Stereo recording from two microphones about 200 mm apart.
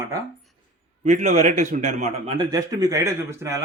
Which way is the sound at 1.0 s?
35° right (ahead or behind).